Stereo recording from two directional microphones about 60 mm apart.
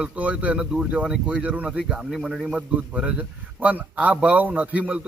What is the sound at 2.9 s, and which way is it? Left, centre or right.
A man's voice, centre.